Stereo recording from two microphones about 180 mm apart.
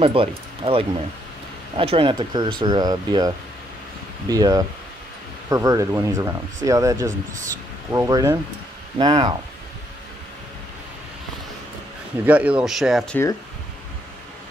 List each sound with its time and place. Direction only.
0.0 s speech: 30° right (ahead or behind)
12.3 s speech: 10° right (ahead or behind)